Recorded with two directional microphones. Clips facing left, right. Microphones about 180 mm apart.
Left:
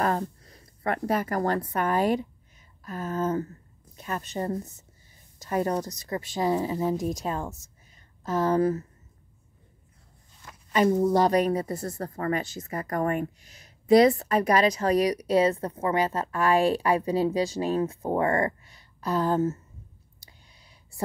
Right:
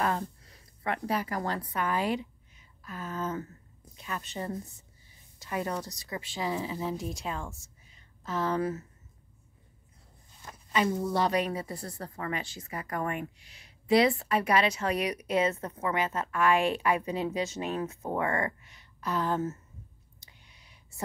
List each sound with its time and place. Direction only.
0.0 s speech: 40° left (ahead or behind)
10.7 s a woman's voice: 45° left (ahead or behind)
20.2 s a sound: 35° left (ahead or behind)